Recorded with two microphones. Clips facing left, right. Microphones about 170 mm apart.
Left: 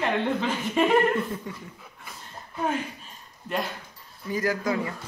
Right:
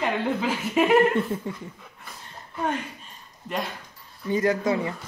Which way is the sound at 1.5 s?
25° right (ahead or behind).